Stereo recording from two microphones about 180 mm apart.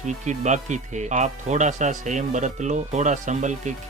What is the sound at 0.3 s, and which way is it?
Speech, 40° right (ahead or behind).